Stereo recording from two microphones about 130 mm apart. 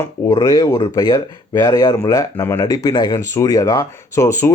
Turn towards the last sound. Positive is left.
turn(degrees=20)  # may be behind; listen again after turning